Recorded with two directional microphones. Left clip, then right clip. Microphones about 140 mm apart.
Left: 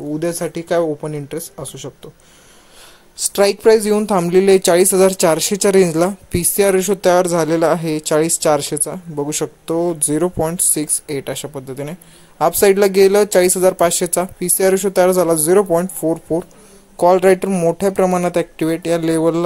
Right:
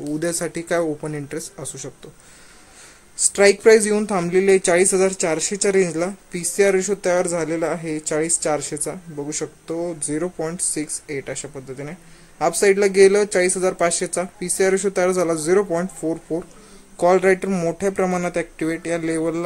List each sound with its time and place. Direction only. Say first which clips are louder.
0.1 s speech: left 3 dB; 15° left (ahead or behind)
3.2 s a man's voice: even; 30° left (ahead or behind)
17.5 s speech: left 6 dB; 15° left (ahead or behind)
17.7 s a man's voice: left 6 dB; 30° left (ahead or behind)